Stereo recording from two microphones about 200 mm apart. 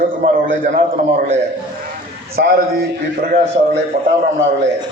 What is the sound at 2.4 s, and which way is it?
Speech, 45° right (ahead or behind).